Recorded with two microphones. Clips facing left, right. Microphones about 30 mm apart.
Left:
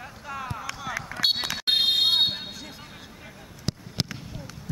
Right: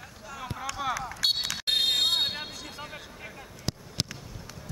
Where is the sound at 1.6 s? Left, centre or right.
Centre.